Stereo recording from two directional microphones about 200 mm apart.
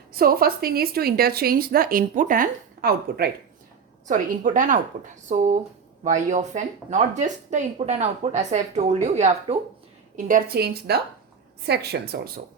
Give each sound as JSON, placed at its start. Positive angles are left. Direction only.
{"t": 0.1, "sound": "speech", "side_deg": -50}